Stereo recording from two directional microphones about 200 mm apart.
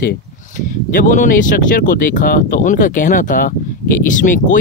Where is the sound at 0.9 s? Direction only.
40° left (ahead or behind).